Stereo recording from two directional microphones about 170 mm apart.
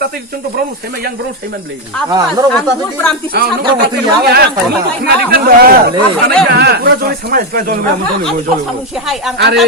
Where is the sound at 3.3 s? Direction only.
70° right (ahead or behind).